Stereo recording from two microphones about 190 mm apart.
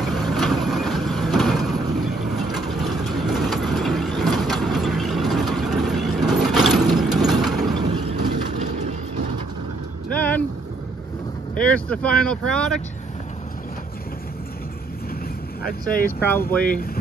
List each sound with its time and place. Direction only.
0.0 s vehicle: centre (ahead or behind)
8.1 s vehicle: 35° right (ahead or behind)
10.1 s vehicle: 10° left (ahead or behind)
11.6 s speech: 5° left (ahead or behind)
16.3 s speech: 10° left (ahead or behind)